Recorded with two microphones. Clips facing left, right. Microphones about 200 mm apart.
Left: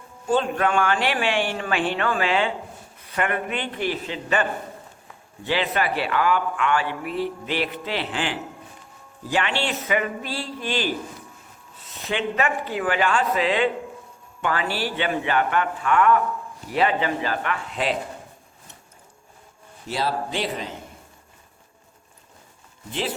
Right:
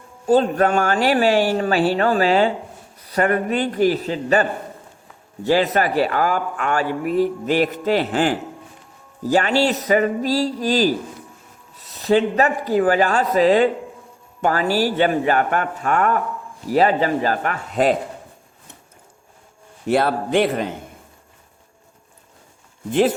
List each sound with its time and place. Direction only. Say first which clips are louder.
0.3 s a man's voice: right 6 dB; 40° right (ahead or behind)
19.9 s speech: right 8 dB; 55° right (ahead or behind)
22.9 s a man's voice: right 11 dB; 50° right (ahead or behind)